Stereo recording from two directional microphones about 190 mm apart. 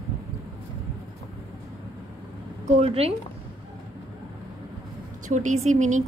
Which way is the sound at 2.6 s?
30° right (ahead or behind).